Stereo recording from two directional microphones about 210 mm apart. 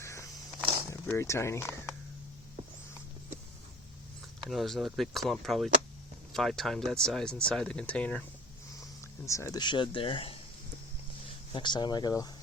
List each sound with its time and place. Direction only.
0.0 s a sound: 15° left (ahead or behind)
0.9 s speech: 15° left (ahead or behind)
4.4 s speech: centre (ahead or behind)
9.2 s speech: 15° left (ahead or behind)
11.5 s speech: 20° left (ahead or behind)